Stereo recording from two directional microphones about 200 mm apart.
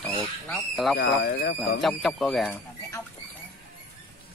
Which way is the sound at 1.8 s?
Centre (ahead or behind).